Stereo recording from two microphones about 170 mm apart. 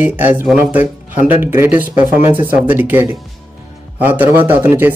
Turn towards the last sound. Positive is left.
turn(degrees=-10)  # may be behind; listen again after turning